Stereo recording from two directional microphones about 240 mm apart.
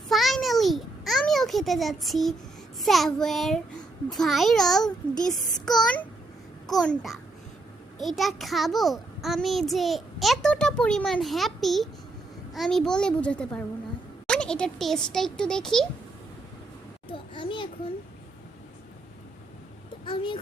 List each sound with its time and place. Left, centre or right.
0.1 s a sound: centre
2.8 s a child's voice: centre
6.7 s a child's voice: centre
17.1 s children playing: left
20.1 s a child's voice: left